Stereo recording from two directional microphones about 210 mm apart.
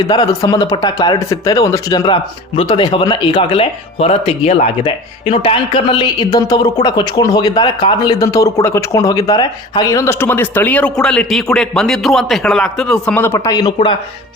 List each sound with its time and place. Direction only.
0.1 s speech: 15° left (ahead or behind)